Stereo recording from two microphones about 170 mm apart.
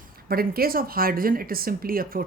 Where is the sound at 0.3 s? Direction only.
60° right (ahead or behind).